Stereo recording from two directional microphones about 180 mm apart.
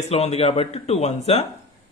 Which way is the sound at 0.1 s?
35° left (ahead or behind).